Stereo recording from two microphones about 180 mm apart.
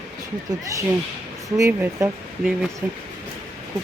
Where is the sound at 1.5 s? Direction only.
15° right (ahead or behind).